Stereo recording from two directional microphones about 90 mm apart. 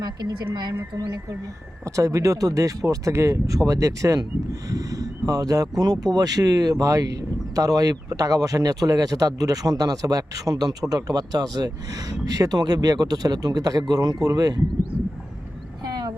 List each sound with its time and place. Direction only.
0.0 s a woman's voice: 50° right (ahead or behind)
1.8 s speech: 35° right (ahead or behind)
15.8 s vehicle: 50° right (ahead or behind)